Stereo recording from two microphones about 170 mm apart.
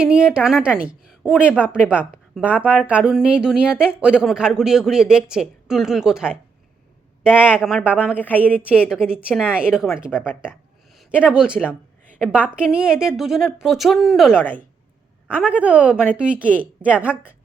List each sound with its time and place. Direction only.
0.0 s speech: 5° right (ahead or behind)
8.1 s a woman's voice: 10° left (ahead or behind)
8.9 s speech: 5° right (ahead or behind)
10.1 s a woman's voice: 10° left (ahead or behind)
11.1 s speech: 5° right (ahead or behind)